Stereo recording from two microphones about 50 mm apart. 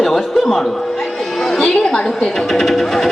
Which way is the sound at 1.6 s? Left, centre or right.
Centre.